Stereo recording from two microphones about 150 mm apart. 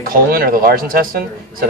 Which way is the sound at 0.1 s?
75° right (ahead or behind).